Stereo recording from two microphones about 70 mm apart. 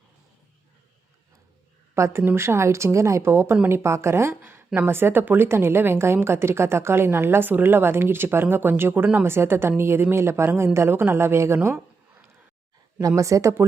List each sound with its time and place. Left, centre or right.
2.0 s a woman's voice: right
13.0 s speech: right